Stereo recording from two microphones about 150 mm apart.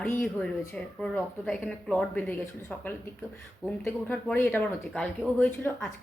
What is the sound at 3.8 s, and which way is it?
A woman's voice, 10° left (ahead or behind).